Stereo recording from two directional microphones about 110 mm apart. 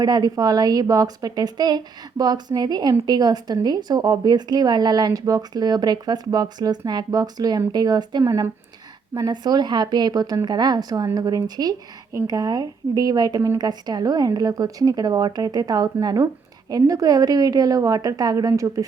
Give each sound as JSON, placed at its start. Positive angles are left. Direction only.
{"t": 0.0, "sound": "a woman's voice", "side_deg": -35}